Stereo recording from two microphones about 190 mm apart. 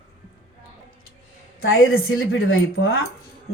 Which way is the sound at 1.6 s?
90° left.